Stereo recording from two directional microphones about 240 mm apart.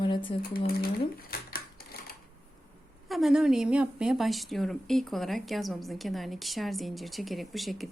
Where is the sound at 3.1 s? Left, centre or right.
Centre.